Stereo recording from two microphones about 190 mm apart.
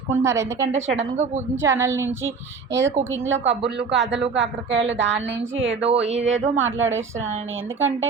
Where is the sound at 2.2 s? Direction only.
80° right.